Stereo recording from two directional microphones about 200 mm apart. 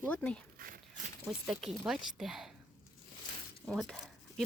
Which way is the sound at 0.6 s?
45° right (ahead or behind).